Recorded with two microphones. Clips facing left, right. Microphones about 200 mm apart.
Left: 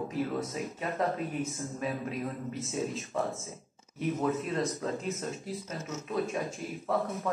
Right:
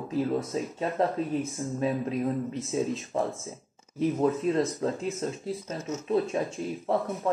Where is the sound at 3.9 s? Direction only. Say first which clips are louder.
Right 5 dB; 30° right (ahead or behind).